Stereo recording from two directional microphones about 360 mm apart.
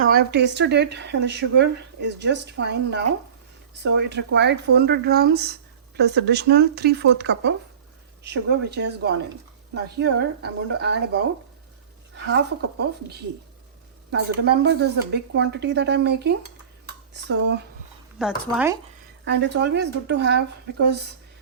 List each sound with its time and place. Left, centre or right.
0.0 s speech: right
12.8 s speech: right
18.2 s speech: centre
19.2 s speech: right